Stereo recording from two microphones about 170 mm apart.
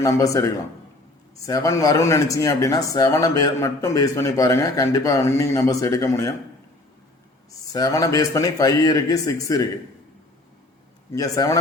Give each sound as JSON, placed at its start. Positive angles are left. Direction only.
{"t": 0.0, "sound": "speech", "side_deg": 20}
{"t": 7.6, "sound": "speech", "side_deg": 20}
{"t": 11.1, "sound": "speech", "side_deg": 20}